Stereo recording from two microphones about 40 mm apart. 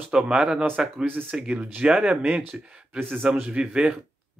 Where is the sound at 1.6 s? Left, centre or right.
Right.